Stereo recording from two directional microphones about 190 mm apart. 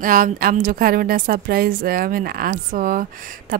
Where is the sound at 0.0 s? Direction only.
45° right (ahead or behind).